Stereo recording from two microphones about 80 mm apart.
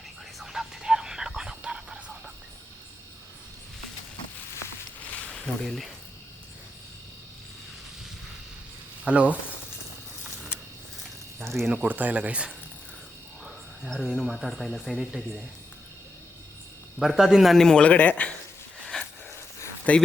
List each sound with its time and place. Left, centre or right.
0.3 s whispering: centre
1.4 s a sound: centre
5.3 s speech: centre
9.0 s speech: centre
11.4 s speech: centre
11.7 s speech: centre
13.4 s speech: centre
17.0 s speech: centre
18.9 s a sound: centre
19.9 s speech: centre